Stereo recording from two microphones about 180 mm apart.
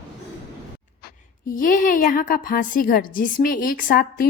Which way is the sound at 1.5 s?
50° left (ahead or behind).